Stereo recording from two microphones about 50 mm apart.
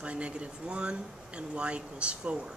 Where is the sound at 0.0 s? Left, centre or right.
Right.